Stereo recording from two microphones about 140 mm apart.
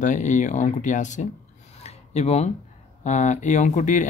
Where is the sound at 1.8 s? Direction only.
50° left (ahead or behind).